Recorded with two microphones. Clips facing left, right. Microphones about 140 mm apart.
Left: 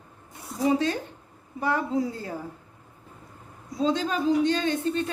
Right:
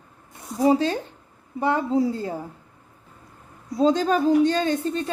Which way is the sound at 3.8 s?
40° right (ahead or behind).